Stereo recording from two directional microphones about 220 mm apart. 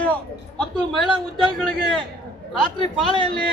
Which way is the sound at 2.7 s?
20° left (ahead or behind).